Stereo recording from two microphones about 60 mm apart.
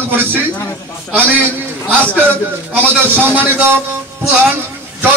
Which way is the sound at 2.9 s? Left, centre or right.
Right.